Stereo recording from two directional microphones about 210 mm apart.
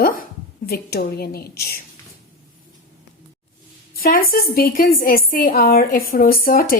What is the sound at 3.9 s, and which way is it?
Speech, 45° left (ahead or behind).